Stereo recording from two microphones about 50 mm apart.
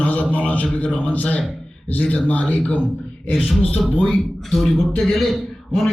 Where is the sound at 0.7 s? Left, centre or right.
Left.